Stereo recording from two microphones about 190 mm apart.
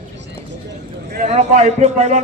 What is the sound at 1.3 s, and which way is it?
Speech, 40° right (ahead or behind).